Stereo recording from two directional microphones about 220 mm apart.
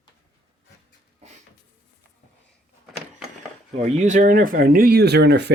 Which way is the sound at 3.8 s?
30° right (ahead or behind).